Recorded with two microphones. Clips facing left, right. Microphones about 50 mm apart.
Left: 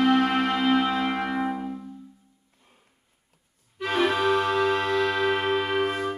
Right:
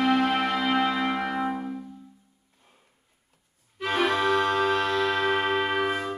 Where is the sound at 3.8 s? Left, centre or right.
Centre.